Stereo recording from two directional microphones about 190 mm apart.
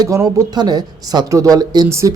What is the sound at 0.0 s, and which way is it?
Speech, 15° right (ahead or behind).